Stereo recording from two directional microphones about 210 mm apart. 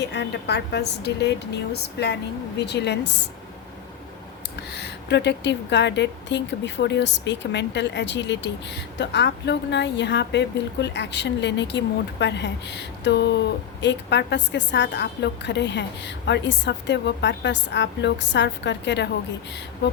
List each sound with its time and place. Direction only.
0.0 s a woman's voice: 55° left (ahead or behind)
4.7 s a woman's voice: 55° left (ahead or behind)